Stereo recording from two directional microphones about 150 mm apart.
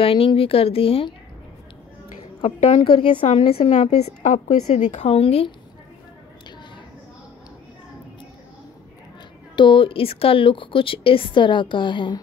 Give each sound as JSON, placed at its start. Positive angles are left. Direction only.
{"t": 0.0, "sound": "a woman's voice", "side_deg": 35}
{"t": 2.4, "sound": "a woman's voice", "side_deg": 35}
{"t": 9.6, "sound": "a woman's voice", "side_deg": 35}